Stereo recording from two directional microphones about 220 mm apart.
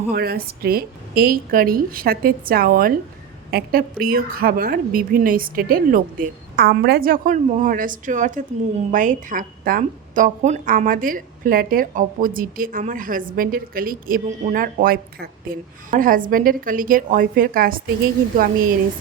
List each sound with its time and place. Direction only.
0.1 s a woman's voice: 45° right (ahead or behind)